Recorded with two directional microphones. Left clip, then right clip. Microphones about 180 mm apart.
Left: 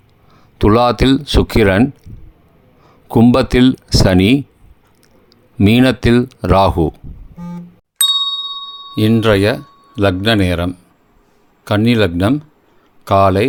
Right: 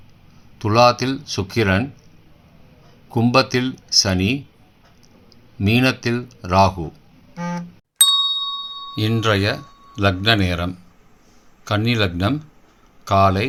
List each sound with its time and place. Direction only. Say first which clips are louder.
0.6 s speech: left 3 dB; 55° left (ahead or behind)
3.1 s speech: left 5 dB; 55° left (ahead or behind)
5.5 s speech: left 6 dB; 60° left (ahead or behind)
7.9 s ding: left 2 dB; centre (ahead or behind)
9.0 s a man's voice: left 7 dB; 45° left (ahead or behind)